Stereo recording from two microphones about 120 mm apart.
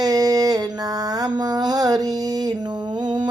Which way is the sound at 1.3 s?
35° right (ahead or behind).